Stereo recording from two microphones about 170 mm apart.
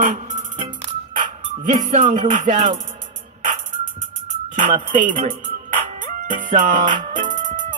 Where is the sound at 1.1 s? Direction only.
50° right (ahead or behind).